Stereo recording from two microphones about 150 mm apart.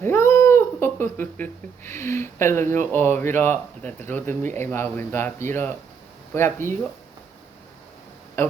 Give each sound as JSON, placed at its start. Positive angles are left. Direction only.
{"t": 0.0, "sound": "speech", "side_deg": 15}